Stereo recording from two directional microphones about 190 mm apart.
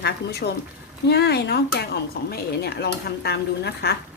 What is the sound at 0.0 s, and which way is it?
Speech, 55° left (ahead or behind).